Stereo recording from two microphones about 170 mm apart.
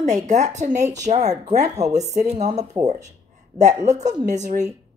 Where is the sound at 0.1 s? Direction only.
45° right (ahead or behind).